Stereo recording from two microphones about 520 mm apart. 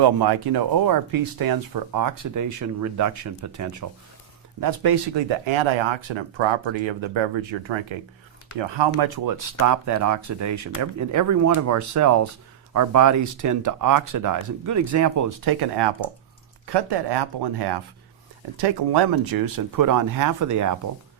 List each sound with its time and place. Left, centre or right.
0.0 s speech: right
5.5 s speech: right